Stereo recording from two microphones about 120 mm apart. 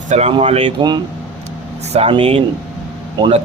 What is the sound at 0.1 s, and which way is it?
Speech, 65° right (ahead or behind).